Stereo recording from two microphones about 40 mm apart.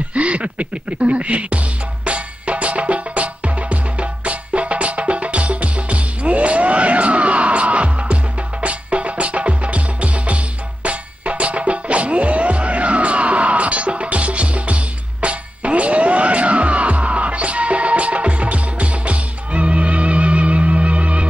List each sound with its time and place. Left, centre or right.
0.1 s music: right